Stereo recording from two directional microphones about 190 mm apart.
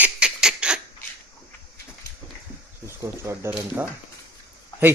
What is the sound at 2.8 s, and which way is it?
Speech, 15° right (ahead or behind).